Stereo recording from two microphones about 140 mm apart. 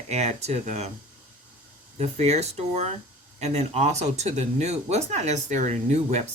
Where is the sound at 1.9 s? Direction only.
50° right (ahead or behind).